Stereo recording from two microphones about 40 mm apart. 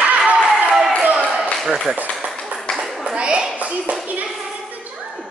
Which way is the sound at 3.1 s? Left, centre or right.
Right.